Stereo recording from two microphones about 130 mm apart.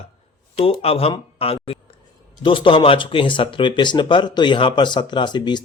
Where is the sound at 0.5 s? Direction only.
50° left (ahead or behind).